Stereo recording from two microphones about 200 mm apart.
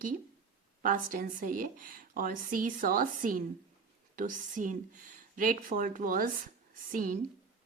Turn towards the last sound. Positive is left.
turn(degrees=-40)  # may be behind; listen again after turning